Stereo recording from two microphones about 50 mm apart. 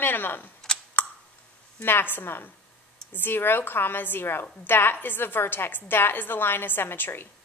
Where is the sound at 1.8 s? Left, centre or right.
Left.